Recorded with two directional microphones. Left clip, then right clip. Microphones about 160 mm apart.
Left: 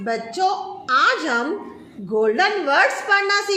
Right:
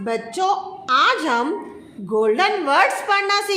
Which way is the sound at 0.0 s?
20° right (ahead or behind).